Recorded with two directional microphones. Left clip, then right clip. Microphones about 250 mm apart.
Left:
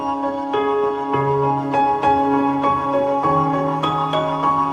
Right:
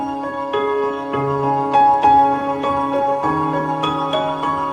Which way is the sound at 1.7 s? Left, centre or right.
Centre.